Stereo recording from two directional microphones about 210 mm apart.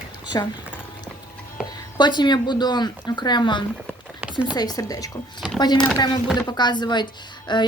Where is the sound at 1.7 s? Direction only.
20° left (ahead or behind).